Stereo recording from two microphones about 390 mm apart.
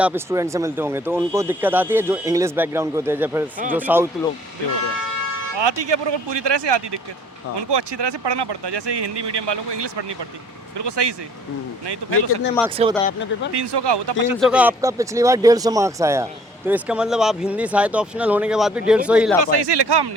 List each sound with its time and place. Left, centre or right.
0.0 s speech: centre
5.5 s speech: right
13.1 s speech: left
13.5 s speech: right
14.4 s speech: centre
19.5 s speech: right